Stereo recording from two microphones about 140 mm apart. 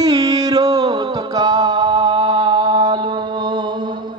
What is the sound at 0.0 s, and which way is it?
Music, 25° right (ahead or behind).